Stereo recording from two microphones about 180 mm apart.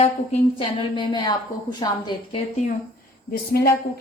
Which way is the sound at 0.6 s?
30° left (ahead or behind).